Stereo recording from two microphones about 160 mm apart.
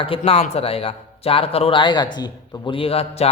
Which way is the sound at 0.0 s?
35° left (ahead or behind).